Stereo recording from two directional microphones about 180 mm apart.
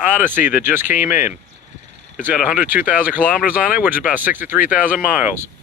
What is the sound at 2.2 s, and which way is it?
Speech, 10° right (ahead or behind).